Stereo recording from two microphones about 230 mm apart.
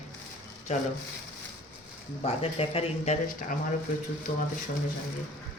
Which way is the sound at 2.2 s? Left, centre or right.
Left.